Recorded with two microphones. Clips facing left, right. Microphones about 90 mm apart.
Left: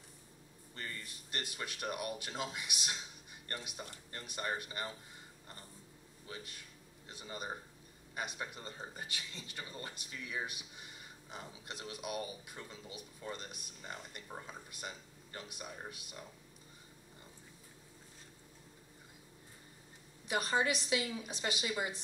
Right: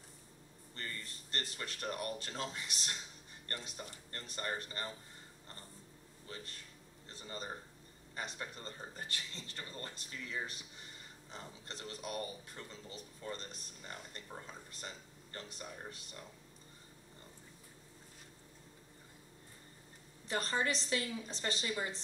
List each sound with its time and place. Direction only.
0.7 s speech: 15° left (ahead or behind)
6.2 s speech: 15° left (ahead or behind)
20.2 s speech: 15° left (ahead or behind)